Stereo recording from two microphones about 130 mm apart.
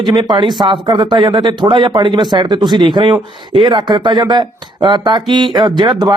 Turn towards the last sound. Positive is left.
turn(degrees=-35)  # may be behind; listen again after turning